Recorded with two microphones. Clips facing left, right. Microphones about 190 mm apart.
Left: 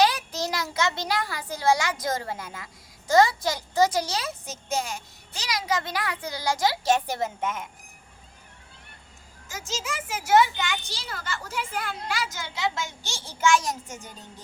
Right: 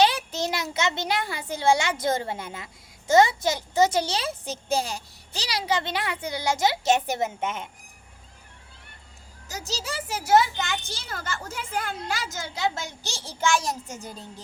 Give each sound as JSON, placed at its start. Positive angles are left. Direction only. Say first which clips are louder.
{"t": 0.0, "sound": "a child's voice", "louder": "right 1 dB", "side_deg": -25}
{"t": 9.5, "sound": "a child's voice", "louder": "even", "side_deg": -35}